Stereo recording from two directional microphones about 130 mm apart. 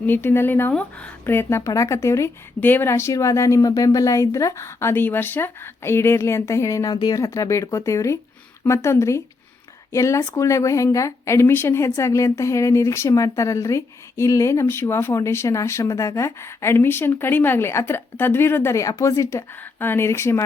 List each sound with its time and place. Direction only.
0.0 s speech: 15° left (ahead or behind)